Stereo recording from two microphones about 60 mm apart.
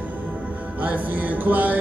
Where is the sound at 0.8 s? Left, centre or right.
Right.